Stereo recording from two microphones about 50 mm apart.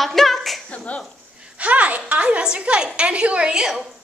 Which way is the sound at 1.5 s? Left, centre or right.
Right.